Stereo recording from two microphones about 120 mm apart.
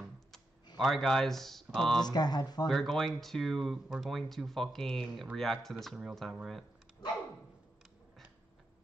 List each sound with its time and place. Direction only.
0.7 s speech: centre (ahead or behind)
2.0 s speech: 35° left (ahead or behind)
2.7 s speech: centre (ahead or behind)